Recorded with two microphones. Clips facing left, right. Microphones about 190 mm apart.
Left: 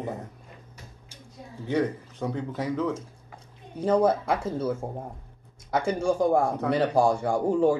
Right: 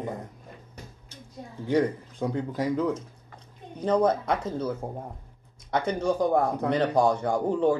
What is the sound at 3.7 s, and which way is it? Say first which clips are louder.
Speech: left 1 dB; 5° left (ahead or behind).